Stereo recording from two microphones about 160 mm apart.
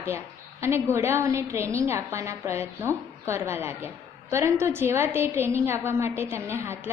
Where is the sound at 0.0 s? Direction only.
15° right (ahead or behind).